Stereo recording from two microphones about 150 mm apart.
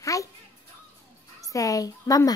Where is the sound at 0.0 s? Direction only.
20° left (ahead or behind).